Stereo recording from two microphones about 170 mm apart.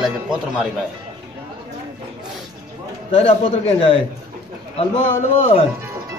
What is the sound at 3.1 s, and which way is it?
Speech, 35° left (ahead or behind).